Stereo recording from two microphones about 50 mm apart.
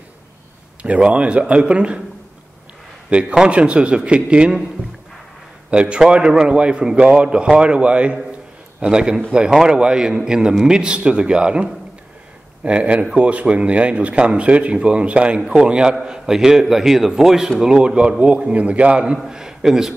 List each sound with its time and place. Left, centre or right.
0.8 s a man's voice: right
3.1 s a man's voice: right
5.7 s a man's voice: right
17.7 s a man's voice: right
19.1 s a man's voice: centre